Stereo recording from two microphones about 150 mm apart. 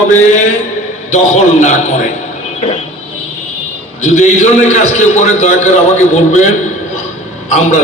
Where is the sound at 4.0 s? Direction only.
50° left (ahead or behind).